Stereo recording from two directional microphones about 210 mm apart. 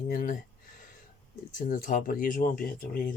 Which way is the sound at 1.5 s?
40° left (ahead or behind).